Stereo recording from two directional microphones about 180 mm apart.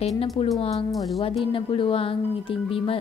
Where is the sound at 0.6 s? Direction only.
35° left (ahead or behind).